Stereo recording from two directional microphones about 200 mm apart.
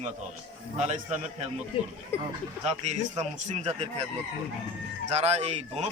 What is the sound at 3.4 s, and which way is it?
Speech, 35° right (ahead or behind).